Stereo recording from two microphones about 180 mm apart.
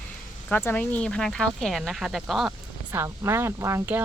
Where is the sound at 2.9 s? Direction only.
15° right (ahead or behind).